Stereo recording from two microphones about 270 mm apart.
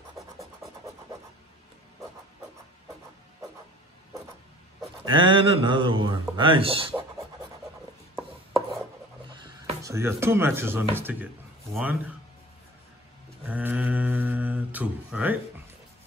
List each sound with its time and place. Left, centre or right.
5.0 s a man's voice: centre
9.3 s music: centre
11.0 s a man's voice: centre
13.5 s mantra: centre